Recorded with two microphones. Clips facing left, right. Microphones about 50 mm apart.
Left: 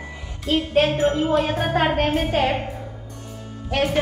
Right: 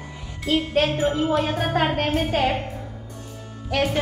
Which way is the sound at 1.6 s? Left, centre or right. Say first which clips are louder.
Left 2 dB; centre.